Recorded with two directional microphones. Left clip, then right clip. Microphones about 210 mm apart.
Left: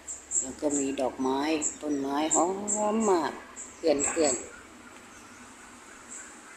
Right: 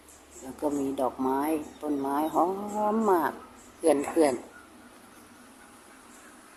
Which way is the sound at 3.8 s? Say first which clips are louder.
Right 2 dB; 15° right (ahead or behind).